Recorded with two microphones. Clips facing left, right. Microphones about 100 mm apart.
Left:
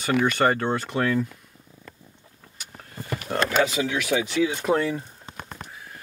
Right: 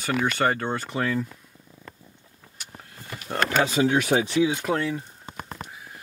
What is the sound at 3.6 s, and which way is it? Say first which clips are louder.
Speech: right 2 dB; 35° right (ahead or behind).